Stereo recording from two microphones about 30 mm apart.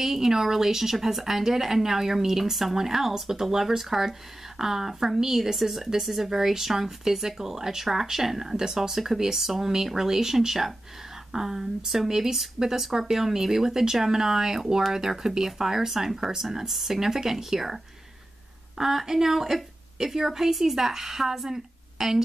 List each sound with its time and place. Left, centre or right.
0.0 s speech: centre
18.8 s speech: centre